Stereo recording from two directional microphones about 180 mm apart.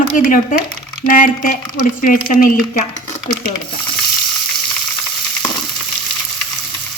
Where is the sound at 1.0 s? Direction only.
45° left (ahead or behind).